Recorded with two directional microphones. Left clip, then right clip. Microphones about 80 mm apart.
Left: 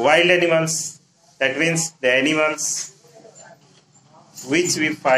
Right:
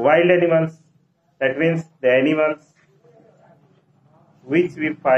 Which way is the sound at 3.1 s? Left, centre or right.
Left.